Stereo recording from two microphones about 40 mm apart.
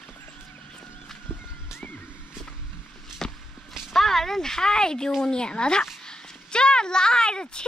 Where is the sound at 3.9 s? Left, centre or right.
Centre.